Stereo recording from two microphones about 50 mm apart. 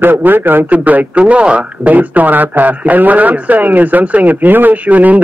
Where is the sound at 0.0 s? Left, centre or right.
Right.